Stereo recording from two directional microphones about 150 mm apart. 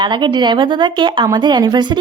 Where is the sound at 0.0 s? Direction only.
30° right (ahead or behind).